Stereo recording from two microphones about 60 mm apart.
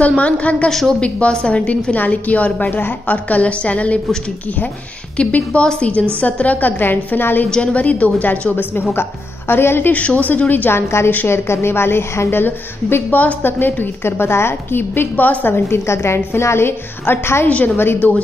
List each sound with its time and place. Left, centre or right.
0.2 s a woman's voice: left
0.7 s a woman's voice: centre
1.0 s a woman's voice: centre
5.1 s a woman's voice: left
7.4 s a woman's voice: centre
7.7 s a woman's voice: left
11.2 s a woman's voice: left
13.5 s a woman's voice: left
17.5 s a woman's voice: left